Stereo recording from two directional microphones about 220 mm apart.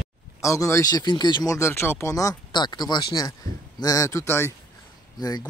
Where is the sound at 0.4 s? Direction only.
15° left (ahead or behind).